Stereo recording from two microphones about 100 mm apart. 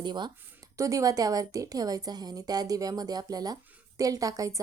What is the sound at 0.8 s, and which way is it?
A woman's voice, 35° right (ahead or behind).